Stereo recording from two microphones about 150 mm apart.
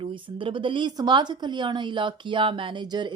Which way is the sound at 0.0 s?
35° right (ahead or behind).